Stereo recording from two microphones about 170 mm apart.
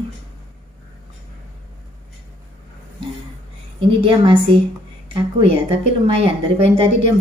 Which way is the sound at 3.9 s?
30° right (ahead or behind).